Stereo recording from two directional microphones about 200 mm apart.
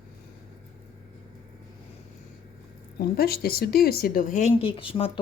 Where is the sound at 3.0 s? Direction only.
50° left (ahead or behind); by 5.2 s 25° left (ahead or behind).